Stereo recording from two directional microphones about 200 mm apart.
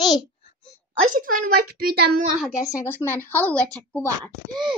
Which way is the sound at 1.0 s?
40° right (ahead or behind).